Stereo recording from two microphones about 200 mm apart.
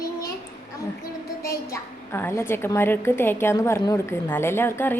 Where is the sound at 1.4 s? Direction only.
15° left (ahead or behind).